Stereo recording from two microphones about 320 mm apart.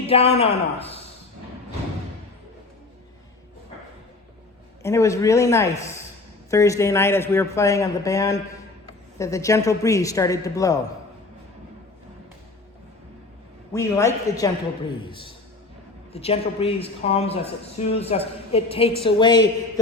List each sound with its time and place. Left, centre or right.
0.0 s speech: centre
4.8 s a man's voice: centre
13.7 s a man's voice: centre